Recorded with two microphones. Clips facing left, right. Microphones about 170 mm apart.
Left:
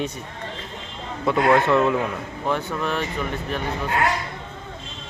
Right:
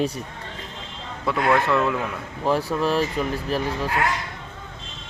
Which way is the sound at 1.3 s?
Centre (ahead or behind).